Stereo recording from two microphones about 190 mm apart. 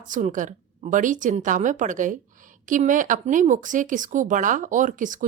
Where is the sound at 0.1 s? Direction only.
45° right (ahead or behind).